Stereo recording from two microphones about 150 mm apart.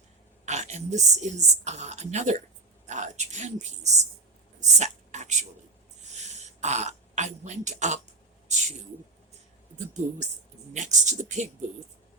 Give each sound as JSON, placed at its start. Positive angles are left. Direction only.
{"t": 0.4, "sound": "speech", "side_deg": -50}
{"t": 4.8, "sound": "a sound", "side_deg": -50}
{"t": 6.1, "sound": "speech", "side_deg": -50}
{"t": 9.7, "sound": "speech", "side_deg": -50}